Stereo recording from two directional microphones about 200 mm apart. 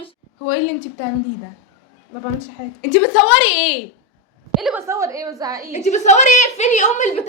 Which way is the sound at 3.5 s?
90° left.